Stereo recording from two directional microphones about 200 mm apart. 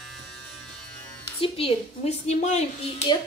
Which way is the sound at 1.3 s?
25° left (ahead or behind).